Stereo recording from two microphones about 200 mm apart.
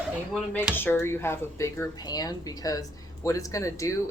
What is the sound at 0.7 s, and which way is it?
Speech, 10° left (ahead or behind).